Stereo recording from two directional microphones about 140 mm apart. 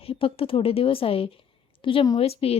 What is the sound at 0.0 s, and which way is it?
A woman's voice, 40° left (ahead or behind).